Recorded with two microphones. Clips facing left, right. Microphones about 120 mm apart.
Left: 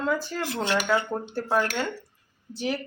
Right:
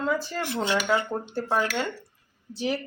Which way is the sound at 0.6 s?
Centre (ahead or behind).